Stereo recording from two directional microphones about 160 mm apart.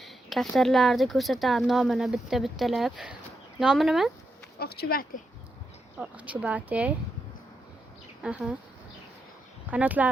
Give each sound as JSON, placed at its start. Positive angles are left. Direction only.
{"t": 0.0, "sound": "speech", "side_deg": 0}
{"t": 4.6, "sound": "speech", "side_deg": 80}
{"t": 6.0, "sound": "speech", "side_deg": -10}
{"t": 8.2, "sound": "speech", "side_deg": -5}
{"t": 9.6, "sound": "speech", "side_deg": -10}